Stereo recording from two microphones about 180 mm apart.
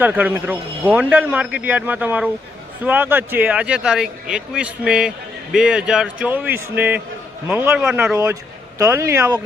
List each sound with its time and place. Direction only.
0.0 s a man's voice: 10° right (ahead or behind)
8.8 s a man's voice: 15° right (ahead or behind)